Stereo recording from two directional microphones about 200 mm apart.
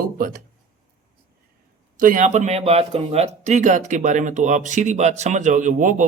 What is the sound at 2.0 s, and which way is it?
Speech, 40° right (ahead or behind).